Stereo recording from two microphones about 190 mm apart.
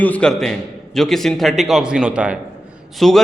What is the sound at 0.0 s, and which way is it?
A man's voice, 5° left (ahead or behind).